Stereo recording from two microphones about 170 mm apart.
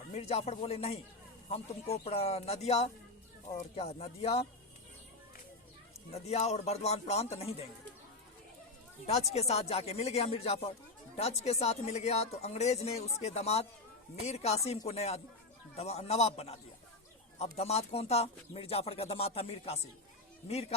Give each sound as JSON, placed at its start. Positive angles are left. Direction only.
{"t": 0.1, "sound": "speech", "side_deg": 35}
{"t": 6.1, "sound": "speech", "side_deg": 35}
{"t": 9.0, "sound": "speech", "side_deg": 40}